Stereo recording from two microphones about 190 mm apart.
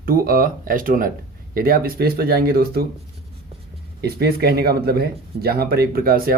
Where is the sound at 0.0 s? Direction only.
50° right (ahead or behind).